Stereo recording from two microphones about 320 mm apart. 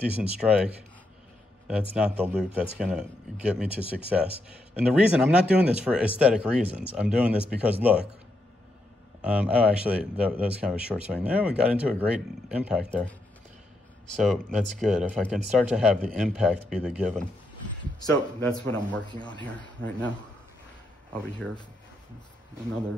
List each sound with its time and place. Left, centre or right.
0.2 s speech: centre
9.2 s speech: centre
14.1 s speech: centre
18.7 s speech: centre